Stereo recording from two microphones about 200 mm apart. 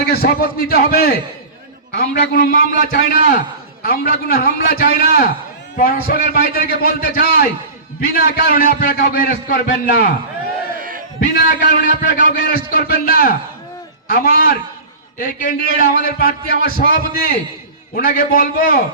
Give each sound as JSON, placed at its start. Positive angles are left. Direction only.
{"t": 0.1, "sound": "a man's voice", "side_deg": 50}
{"t": 10.8, "sound": "battle cry", "side_deg": -45}
{"t": 11.2, "sound": "a man's voice", "side_deg": 40}